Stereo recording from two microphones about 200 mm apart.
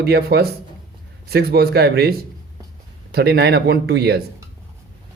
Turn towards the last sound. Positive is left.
turn(degrees=-55)  # may be behind; listen again after turning